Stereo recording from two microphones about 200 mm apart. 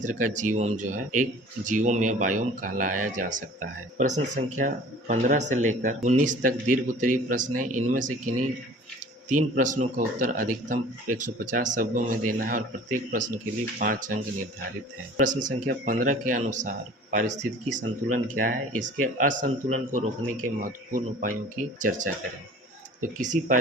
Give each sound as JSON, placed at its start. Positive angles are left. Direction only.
{"t": 0.0, "sound": "speech", "side_deg": -40}
{"t": 4.5, "sound": "speech", "side_deg": -40}
{"t": 9.3, "sound": "speech", "side_deg": -40}
{"t": 15.2, "sound": "speech", "side_deg": -40}